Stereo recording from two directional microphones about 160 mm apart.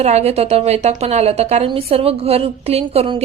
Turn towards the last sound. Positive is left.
turn(degrees=-40)  # may be behind; listen again after turning